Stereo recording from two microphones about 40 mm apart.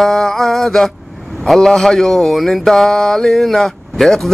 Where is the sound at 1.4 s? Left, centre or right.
Centre.